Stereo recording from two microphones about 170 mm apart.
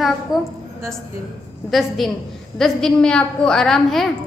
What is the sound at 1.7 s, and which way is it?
A woman's voice, centre (ahead or behind).